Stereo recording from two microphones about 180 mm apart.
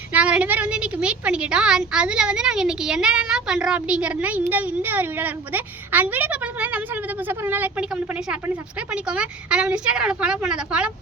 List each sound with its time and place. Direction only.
0.1 s a woman's voice: 5° right (ahead or behind)